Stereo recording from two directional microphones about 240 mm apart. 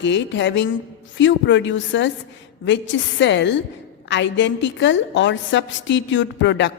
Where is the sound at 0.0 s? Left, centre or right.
Left.